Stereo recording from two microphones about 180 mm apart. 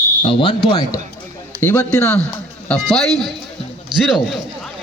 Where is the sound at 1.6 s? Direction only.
10° left (ahead or behind).